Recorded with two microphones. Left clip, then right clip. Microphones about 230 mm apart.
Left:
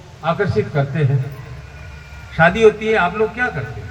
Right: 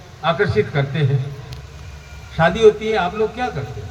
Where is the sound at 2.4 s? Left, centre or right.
Right.